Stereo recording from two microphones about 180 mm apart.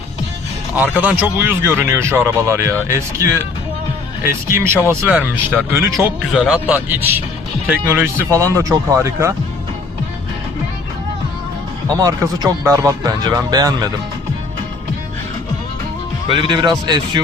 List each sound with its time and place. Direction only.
0.8 s speech: 10° right (ahead or behind)
4.3 s speech: 15° right (ahead or behind)
11.9 s speech: 20° right (ahead or behind)
16.3 s speech: 25° right (ahead or behind)